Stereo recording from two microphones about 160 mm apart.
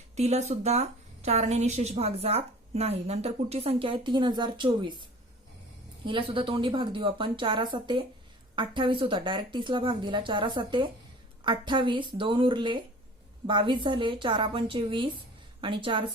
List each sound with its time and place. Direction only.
0.2 s a woman's voice: 45° right (ahead or behind)
6.1 s a woman's voice: 30° right (ahead or behind)